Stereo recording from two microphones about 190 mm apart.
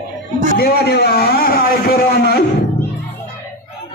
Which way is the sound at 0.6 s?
60° left (ahead or behind).